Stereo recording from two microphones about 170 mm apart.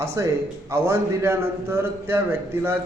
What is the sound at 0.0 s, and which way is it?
A man's voice, 15° right (ahead or behind).